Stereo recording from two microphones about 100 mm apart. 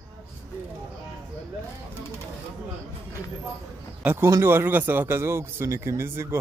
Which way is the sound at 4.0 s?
15° right (ahead or behind).